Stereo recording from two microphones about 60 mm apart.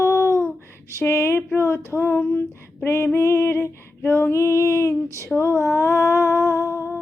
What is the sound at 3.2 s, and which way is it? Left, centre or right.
Female singing, left.